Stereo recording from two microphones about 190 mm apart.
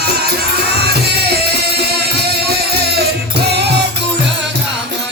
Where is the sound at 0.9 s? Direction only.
55° right (ahead or behind).